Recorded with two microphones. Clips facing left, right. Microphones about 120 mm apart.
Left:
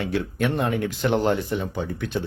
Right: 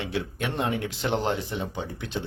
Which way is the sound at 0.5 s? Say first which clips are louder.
Left 4 dB; 20° right (ahead or behind).